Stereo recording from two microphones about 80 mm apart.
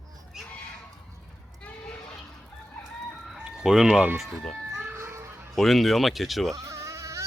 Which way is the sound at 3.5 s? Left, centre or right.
Centre.